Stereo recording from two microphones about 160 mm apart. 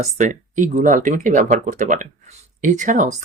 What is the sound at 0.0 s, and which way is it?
Speech, 50° right (ahead or behind).